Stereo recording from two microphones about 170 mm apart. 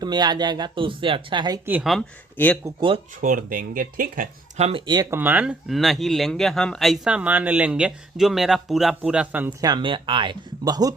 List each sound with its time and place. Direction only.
0.0 s speech: 25° right (ahead or behind)
1.6 s a woman's voice: 10° right (ahead or behind)
1.9 s speech: 5° left (ahead or behind)
3.2 s speech: 50° right (ahead or behind)
5.1 s speech: 10° right (ahead or behind)
9.6 s speech: 25° right (ahead or behind)